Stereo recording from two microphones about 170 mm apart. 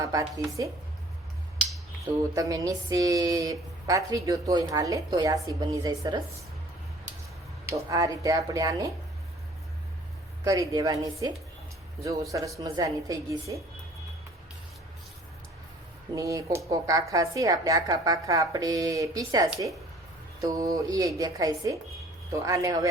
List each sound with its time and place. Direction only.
0.0 s speech: 20° right (ahead or behind)
2.3 s speech: 20° right (ahead or behind)
7.7 s speech: 20° right (ahead or behind)
10.4 s speech: 20° right (ahead or behind)
12.3 s speech: 20° right (ahead or behind)
16.1 s speech: 20° right (ahead or behind)
20.4 s speech: 20° right (ahead or behind)